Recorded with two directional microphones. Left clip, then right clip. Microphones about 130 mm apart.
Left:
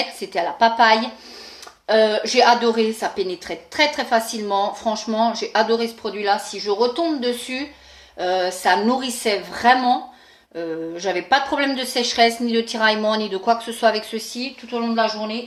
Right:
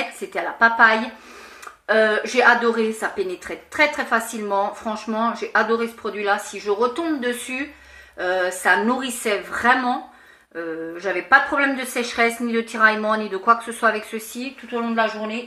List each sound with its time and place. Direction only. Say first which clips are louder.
0.3 s speech: even; 25° left (ahead or behind)
10.9 s speech: right 3 dB; 25° left (ahead or behind)